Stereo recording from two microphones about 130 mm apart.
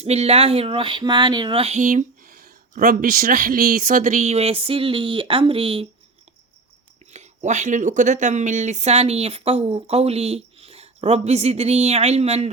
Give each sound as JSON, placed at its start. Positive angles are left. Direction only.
{"t": 0.0, "sound": "speech", "side_deg": -55}
{"t": 2.7, "sound": "speech", "side_deg": -90}
{"t": 7.1, "sound": "speech", "side_deg": -65}